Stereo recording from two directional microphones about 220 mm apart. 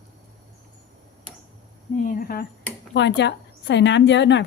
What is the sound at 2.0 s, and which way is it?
Speech, 40° left (ahead or behind).